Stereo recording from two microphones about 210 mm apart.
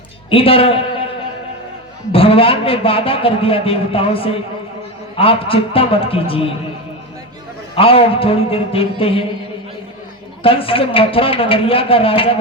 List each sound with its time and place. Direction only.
0.3 s a man's voice: 25° left (ahead or behind)
2.1 s a man's voice: 25° left (ahead or behind)
7.8 s a man's voice: 25° left (ahead or behind)
10.4 s a man's voice: 25° left (ahead or behind)